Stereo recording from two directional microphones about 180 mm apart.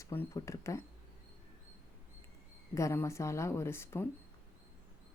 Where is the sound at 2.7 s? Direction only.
15° left (ahead or behind).